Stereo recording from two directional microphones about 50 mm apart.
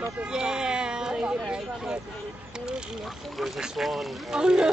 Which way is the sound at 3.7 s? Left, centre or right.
Centre.